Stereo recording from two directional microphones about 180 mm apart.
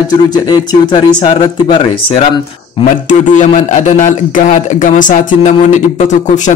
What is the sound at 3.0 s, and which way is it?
A man's voice, 45° left (ahead or behind).